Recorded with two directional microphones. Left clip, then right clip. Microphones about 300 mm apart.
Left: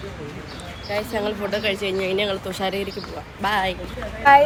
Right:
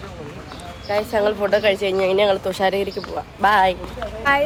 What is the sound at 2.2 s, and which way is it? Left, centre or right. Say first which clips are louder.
Speech: right 7 dB; centre.